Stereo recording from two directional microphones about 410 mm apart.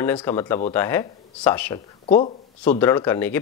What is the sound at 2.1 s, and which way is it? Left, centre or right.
Speech, centre.